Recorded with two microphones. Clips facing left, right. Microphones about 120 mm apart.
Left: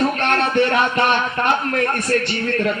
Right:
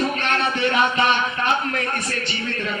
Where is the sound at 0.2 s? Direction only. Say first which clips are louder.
Left 5 dB; 55° left (ahead or behind).